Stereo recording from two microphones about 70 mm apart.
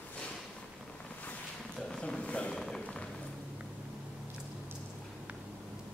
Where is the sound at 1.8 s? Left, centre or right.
Centre.